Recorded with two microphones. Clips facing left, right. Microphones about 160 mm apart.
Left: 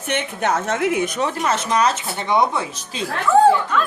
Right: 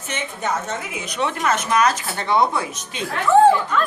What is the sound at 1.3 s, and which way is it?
Speech, 30° left (ahead or behind).